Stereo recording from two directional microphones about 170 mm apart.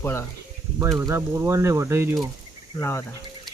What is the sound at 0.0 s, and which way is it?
Speech, 15° left (ahead or behind).